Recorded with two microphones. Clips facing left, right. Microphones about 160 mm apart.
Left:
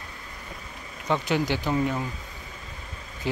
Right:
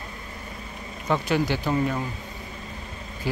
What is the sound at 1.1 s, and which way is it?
Speech, 20° left (ahead or behind).